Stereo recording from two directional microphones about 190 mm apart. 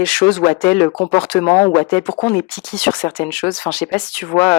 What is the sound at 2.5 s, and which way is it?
Speech, 5° left (ahead or behind).